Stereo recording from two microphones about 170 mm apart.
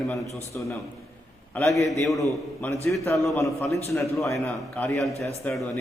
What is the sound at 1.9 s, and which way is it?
A man's voice, centre (ahead or behind).